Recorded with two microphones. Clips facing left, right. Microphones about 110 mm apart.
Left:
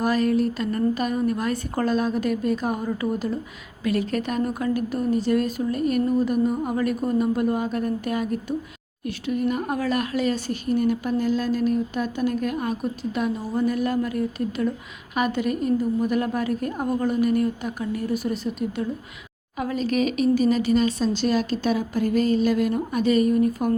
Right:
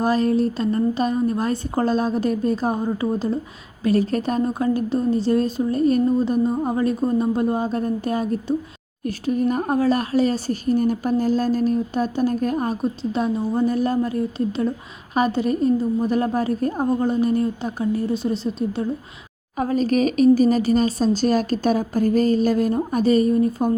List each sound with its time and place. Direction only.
0.0 s speech: 30° right (ahead or behind)
19.5 s speech: 40° right (ahead or behind)